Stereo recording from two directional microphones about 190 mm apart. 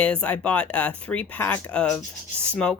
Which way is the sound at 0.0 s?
5° left (ahead or behind).